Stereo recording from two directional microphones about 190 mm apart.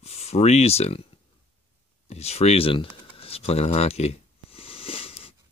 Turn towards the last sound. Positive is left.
turn(degrees=30)  # may be behind; listen again after turning